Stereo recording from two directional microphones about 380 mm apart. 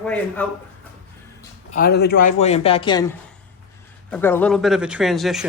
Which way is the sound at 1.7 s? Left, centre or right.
Left.